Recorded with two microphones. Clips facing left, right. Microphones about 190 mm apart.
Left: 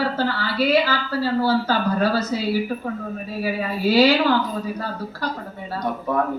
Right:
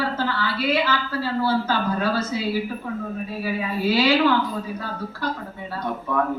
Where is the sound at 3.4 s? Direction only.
40° left (ahead or behind).